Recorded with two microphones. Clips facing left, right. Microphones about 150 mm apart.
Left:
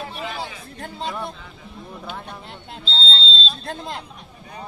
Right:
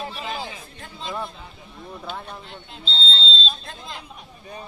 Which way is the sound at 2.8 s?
35° left (ahead or behind).